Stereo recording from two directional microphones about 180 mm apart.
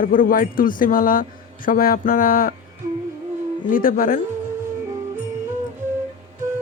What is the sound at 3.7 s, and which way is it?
Speech, 50° left (ahead or behind).